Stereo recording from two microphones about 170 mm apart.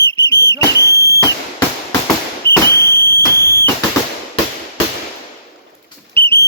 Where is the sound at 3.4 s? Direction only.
15° left (ahead or behind).